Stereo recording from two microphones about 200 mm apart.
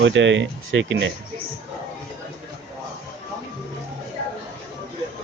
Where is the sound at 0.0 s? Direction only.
65° right (ahead or behind).